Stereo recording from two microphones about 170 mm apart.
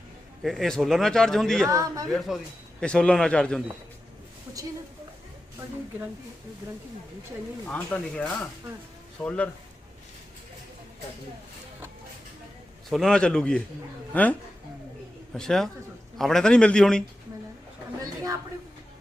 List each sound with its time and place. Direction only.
0.4 s speech: centre (ahead or behind)
1.6 s a man's voice: 20° right (ahead or behind)
2.0 s speech: centre (ahead or behind)
4.5 s a sound: 20° right (ahead or behind)
7.7 s speech: 5° left (ahead or behind)
12.9 s speech: centre (ahead or behind)
18.0 s a sound: 20° right (ahead or behind)